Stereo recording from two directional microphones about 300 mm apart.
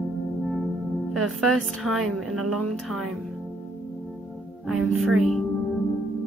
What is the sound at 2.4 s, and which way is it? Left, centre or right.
Speech, right.